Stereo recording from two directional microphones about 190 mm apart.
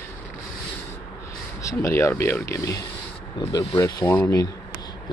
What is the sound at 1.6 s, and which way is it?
Speech, 15° left (ahead or behind).